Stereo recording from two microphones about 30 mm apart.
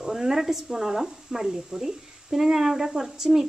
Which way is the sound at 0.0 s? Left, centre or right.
Centre.